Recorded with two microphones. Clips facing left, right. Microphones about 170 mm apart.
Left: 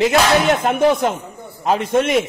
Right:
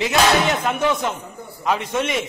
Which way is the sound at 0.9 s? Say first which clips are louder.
Left 5 dB; 50° left (ahead or behind).